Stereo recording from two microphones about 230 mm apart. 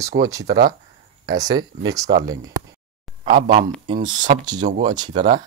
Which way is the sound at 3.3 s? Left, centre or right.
Right.